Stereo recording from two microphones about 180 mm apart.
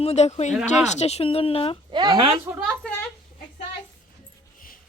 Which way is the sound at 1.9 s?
25° right (ahead or behind).